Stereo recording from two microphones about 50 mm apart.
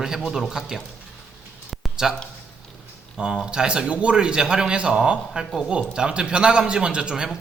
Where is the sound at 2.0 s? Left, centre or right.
Centre.